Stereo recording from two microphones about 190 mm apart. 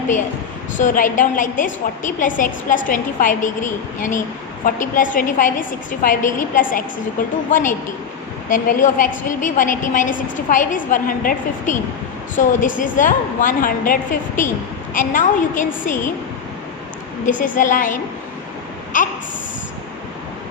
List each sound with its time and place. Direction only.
0.8 s a woman's voice: 45° left (ahead or behind)
17.2 s a woman's voice: 45° left (ahead or behind)
18.9 s a woman's voice: 45° left (ahead or behind)